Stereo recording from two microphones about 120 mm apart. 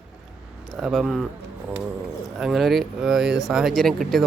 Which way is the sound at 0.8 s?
Centre (ahead or behind).